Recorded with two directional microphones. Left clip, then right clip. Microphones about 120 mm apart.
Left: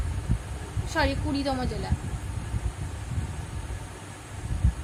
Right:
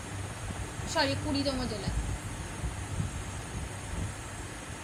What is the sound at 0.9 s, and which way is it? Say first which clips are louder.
Speech: left 3 dB; 50° left (ahead or behind).